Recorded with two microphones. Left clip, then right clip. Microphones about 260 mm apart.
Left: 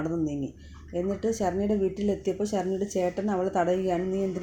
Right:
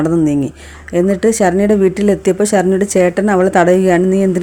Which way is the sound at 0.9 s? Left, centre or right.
Right.